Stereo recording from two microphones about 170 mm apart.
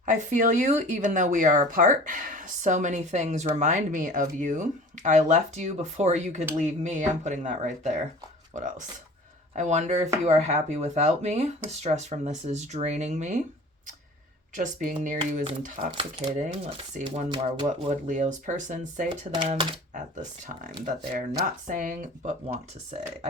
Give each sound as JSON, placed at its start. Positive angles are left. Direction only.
{"t": 0.1, "sound": "speech", "side_deg": -45}
{"t": 14.5, "sound": "speech", "side_deg": -50}
{"t": 15.9, "sound": "speech", "side_deg": -30}
{"t": 17.7, "sound": "speech", "side_deg": -45}